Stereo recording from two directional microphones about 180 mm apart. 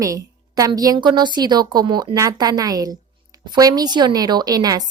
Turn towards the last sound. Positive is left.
turn(degrees=-20)  # may be behind; listen again after turning